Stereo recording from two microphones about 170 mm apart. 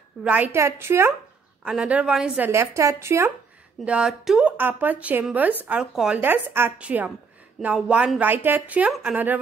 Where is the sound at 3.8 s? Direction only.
5° right (ahead or behind).